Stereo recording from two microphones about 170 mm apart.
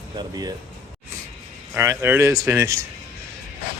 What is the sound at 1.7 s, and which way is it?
Speech, 15° right (ahead or behind).